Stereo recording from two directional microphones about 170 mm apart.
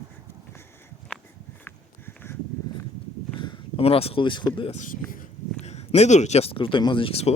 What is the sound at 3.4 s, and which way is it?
Speech, 30° left (ahead or behind).